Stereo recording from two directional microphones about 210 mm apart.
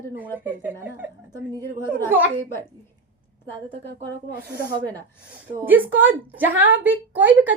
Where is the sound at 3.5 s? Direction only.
25° right (ahead or behind).